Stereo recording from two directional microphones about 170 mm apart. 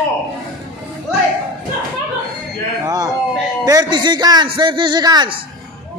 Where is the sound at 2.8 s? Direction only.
20° right (ahead or behind).